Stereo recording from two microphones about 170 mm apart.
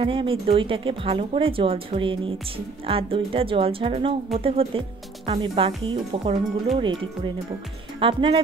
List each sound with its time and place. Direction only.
0.0 s speech: 30° right (ahead or behind)